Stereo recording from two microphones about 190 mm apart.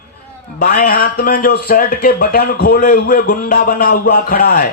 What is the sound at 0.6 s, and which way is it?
A man's voice, 50° left (ahead or behind).